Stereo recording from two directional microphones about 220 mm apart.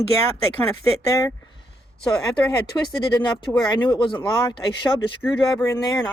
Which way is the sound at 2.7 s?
15° left (ahead or behind).